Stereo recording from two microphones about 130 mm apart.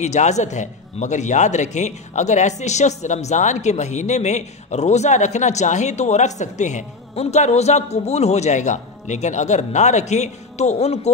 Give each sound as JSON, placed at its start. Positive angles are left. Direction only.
{"t": 0.0, "sound": "a man's voice", "side_deg": 65}